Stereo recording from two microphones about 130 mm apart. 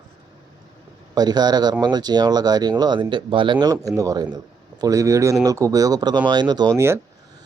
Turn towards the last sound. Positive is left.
turn(degrees=-30)  # may be behind; listen again after turning